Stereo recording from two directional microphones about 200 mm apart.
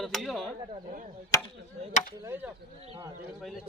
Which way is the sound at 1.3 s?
15° left (ahead or behind).